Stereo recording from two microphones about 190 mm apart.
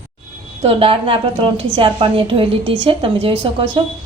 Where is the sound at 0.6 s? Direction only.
30° right (ahead or behind).